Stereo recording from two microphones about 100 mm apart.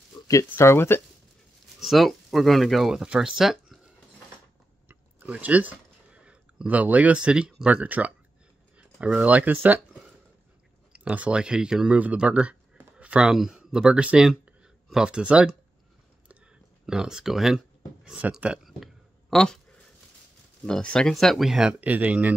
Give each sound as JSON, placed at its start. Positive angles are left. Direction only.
{"t": 0.3, "sound": "speech", "side_deg": 30}
{"t": 1.8, "sound": "speech", "side_deg": 0}
{"t": 4.8, "sound": "speech", "side_deg": -15}
{"t": 10.9, "sound": "speech", "side_deg": -10}
{"t": 16.8, "sound": "speech", "side_deg": -5}
{"t": 19.3, "sound": "a sound", "side_deg": 5}
{"t": 20.6, "sound": "speech", "side_deg": 10}